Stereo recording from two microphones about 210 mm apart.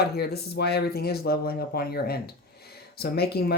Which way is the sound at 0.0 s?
50° left (ahead or behind).